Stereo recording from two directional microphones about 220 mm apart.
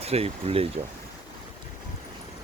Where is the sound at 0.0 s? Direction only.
25° right (ahead or behind).